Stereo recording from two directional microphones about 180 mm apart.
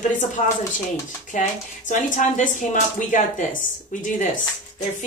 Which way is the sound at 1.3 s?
45° left (ahead or behind).